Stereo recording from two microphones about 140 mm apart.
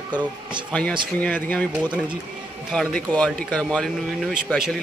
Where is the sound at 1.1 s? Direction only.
10° left (ahead or behind).